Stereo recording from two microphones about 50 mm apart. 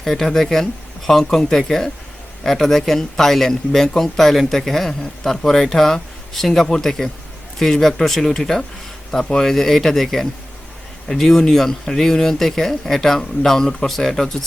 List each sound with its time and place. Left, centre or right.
0.0 s a man's voice: centre